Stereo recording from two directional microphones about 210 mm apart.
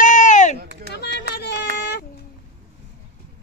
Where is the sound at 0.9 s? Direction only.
50° left (ahead or behind).